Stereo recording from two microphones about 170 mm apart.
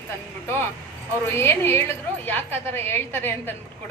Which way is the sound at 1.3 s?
15° left (ahead or behind).